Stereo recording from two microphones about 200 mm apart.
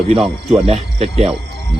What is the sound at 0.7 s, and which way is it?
Speech, 30° right (ahead or behind).